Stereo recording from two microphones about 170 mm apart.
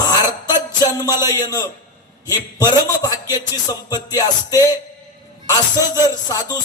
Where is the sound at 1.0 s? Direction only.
20° left (ahead or behind).